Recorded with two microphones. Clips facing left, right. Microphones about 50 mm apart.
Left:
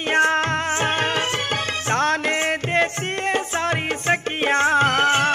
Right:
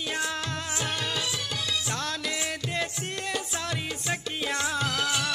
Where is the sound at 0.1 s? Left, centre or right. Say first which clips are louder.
Left 15 dB; left.